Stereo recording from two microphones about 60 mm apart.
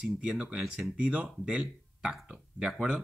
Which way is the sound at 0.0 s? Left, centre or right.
Centre.